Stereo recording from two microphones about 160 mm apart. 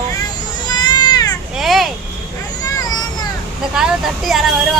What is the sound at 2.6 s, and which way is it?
Vehicle, 25° left (ahead or behind).